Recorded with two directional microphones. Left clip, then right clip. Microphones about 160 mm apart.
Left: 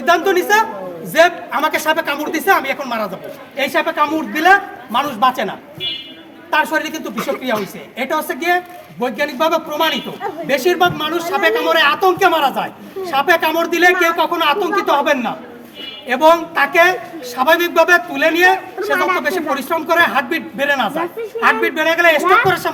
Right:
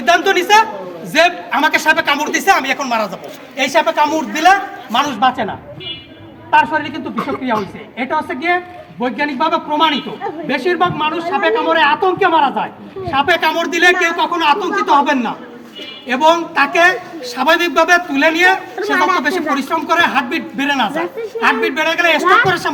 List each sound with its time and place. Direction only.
0.0 s a sound: 20° left (ahead or behind)
1.1 s a man's voice: 30° left (ahead or behind)
7.9 s a man's voice: 30° left (ahead or behind)